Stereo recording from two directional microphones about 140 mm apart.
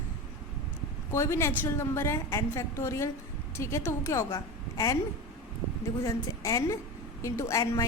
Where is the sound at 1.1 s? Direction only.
20° left (ahead or behind).